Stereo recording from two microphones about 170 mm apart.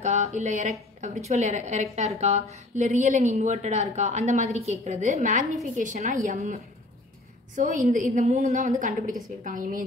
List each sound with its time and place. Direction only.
0.0 s a woman's voice: 40° right (ahead or behind)
9.4 s a woman's voice: 55° right (ahead or behind)